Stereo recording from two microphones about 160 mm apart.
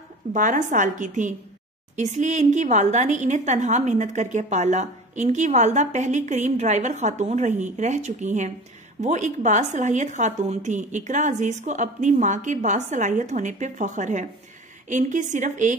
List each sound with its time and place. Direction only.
0.3 s a woman's voice: 55° right (ahead or behind)